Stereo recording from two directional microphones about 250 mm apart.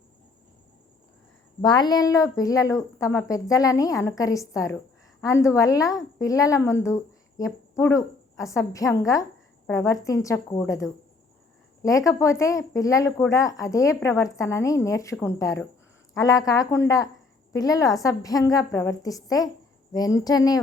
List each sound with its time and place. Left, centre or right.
1.6 s a woman's voice: centre